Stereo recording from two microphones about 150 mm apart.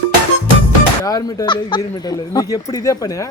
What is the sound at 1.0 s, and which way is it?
A woman's voice, 25° left (ahead or behind).